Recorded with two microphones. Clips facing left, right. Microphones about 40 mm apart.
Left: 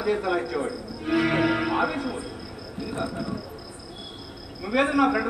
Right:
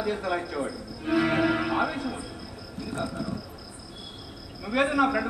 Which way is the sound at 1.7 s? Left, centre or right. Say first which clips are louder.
Left 2 dB; centre.